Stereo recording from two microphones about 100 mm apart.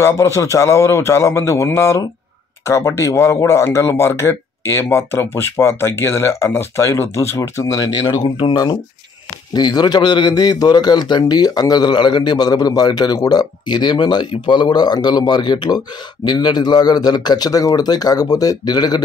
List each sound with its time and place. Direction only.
0.0 s speech: 30° left (ahead or behind)
8.2 s a man's voice: 55° left (ahead or behind)